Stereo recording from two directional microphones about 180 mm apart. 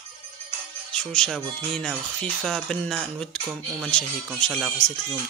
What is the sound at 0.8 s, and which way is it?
Speech, 5° left (ahead or behind).